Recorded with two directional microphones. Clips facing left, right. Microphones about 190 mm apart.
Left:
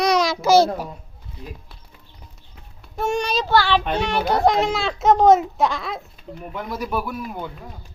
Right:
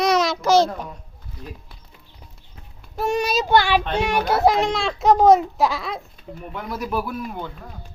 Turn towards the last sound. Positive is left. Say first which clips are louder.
# even
turn(degrees=0)  # may be behind; listen again after turning